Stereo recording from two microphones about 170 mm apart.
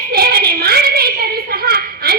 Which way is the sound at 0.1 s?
65° right (ahead or behind).